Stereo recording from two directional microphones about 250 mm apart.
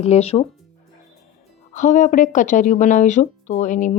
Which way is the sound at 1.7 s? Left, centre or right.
Left.